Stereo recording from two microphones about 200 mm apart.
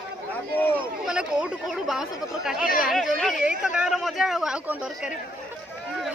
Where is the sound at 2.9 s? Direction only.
Centre (ahead or behind).